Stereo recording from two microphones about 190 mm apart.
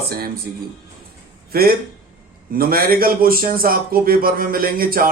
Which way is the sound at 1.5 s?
55° right (ahead or behind).